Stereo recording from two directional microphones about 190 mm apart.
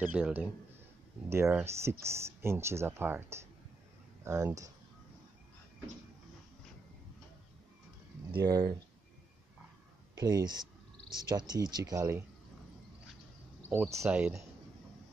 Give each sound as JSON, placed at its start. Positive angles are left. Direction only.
{"t": 0.0, "sound": "speech", "side_deg": -10}
{"t": 8.4, "sound": "speech", "side_deg": -20}
{"t": 10.1, "sound": "speech", "side_deg": -20}
{"t": 13.7, "sound": "speech", "side_deg": -15}